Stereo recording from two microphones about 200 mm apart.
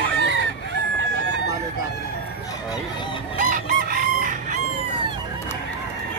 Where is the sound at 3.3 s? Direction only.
40° right (ahead or behind).